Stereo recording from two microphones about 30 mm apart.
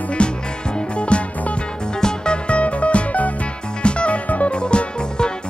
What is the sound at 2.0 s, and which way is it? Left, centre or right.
Music, left.